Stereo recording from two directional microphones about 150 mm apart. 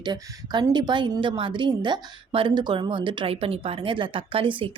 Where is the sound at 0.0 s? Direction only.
30° right (ahead or behind).